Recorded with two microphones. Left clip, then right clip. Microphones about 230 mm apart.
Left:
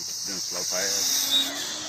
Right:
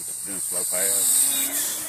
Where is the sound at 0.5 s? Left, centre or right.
Right.